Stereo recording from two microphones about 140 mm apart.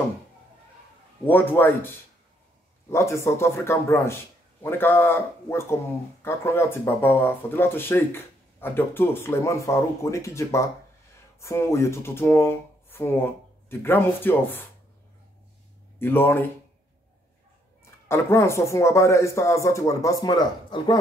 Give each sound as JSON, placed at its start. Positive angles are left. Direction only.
{"t": 1.2, "sound": "speech", "side_deg": 15}
{"t": 2.9, "sound": "speech", "side_deg": 20}
{"t": 16.0, "sound": "speech", "side_deg": 15}
{"t": 18.0, "sound": "speech", "side_deg": 20}